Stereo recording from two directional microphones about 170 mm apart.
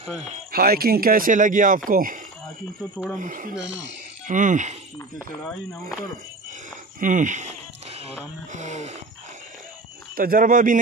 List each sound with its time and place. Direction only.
0.5 s speech: 60° right (ahead or behind)
3.2 s speech: 50° right (ahead or behind)
7.0 s speech: 50° right (ahead or behind)
7.9 s music: 35° right (ahead or behind)
8.5 s speech: 45° right (ahead or behind)
10.1 s speech: 55° right (ahead or behind)